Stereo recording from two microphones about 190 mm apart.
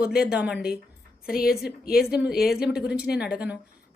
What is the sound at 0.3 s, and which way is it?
Speech, 5° right (ahead or behind).